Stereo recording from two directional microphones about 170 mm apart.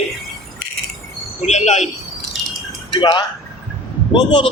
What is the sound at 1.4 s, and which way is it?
Speech, 40° left (ahead or behind).